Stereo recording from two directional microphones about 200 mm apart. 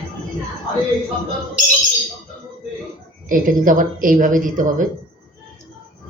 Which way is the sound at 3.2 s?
45° right (ahead or behind).